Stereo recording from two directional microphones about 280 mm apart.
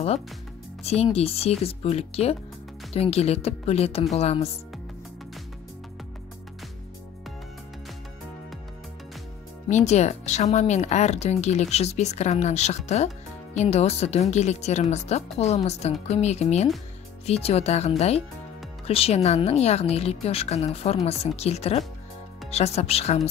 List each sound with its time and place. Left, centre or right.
0.8 s speech: left
9.7 s speech: left